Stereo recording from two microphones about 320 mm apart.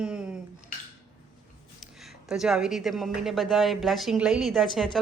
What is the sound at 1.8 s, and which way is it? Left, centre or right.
Speech, centre.